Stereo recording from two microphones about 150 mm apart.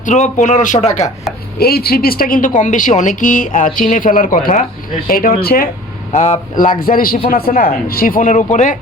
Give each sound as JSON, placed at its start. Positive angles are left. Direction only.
{"t": 0.0, "sound": "a woman's voice", "side_deg": 55}
{"t": 1.5, "sound": "a woman's voice", "side_deg": 90}
{"t": 6.1, "sound": "speech", "side_deg": 55}